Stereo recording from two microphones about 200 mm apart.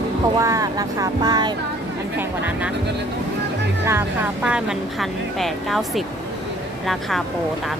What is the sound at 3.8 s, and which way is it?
Speech, 10° right (ahead or behind).